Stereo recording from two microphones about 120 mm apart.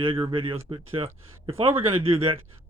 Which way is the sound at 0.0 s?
45° right (ahead or behind).